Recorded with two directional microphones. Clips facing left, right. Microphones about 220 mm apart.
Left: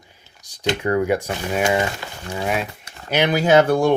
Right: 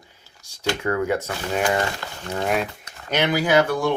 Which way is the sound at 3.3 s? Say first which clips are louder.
Left 4 dB; 25° left (ahead or behind).